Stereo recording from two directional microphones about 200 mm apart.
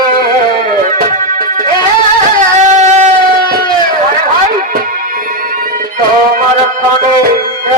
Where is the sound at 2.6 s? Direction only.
35° right (ahead or behind).